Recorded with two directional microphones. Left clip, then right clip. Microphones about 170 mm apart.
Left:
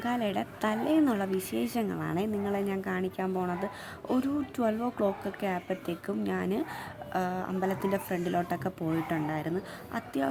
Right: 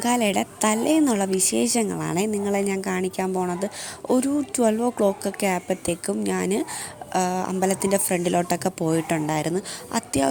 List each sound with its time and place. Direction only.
0.0 s a woman's voice: 35° right (ahead or behind)